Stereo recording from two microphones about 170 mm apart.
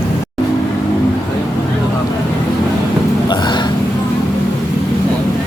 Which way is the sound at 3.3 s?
25° left (ahead or behind).